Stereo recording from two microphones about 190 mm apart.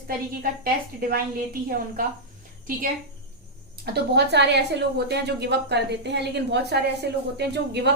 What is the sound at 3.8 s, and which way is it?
A woman's voice, 60° right (ahead or behind).